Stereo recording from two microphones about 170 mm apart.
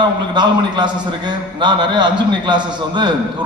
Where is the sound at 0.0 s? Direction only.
25° right (ahead or behind).